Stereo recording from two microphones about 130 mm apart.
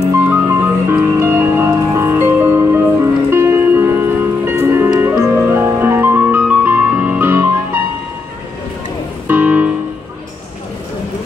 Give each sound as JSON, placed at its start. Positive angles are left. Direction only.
{"t": 0.1, "sound": "music", "side_deg": -20}
{"t": 9.3, "sound": "music", "side_deg": -15}